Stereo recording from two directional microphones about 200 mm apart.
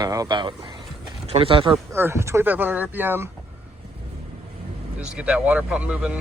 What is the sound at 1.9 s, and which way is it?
Speech, 10° right (ahead or behind).